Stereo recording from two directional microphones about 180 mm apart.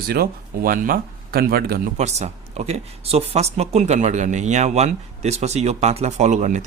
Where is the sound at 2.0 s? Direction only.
40° right (ahead or behind).